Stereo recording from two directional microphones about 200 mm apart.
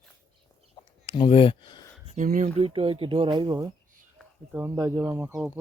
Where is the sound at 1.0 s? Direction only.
25° left (ahead or behind).